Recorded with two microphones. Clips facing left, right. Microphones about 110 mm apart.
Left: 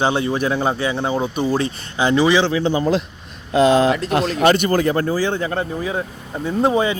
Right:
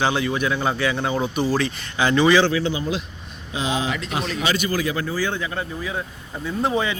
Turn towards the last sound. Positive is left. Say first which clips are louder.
# left 5 dB
turn(degrees=25)  # may be behind; listen again after turning